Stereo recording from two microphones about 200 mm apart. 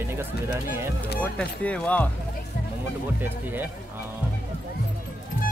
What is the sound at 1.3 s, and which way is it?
Speech, 5° left (ahead or behind).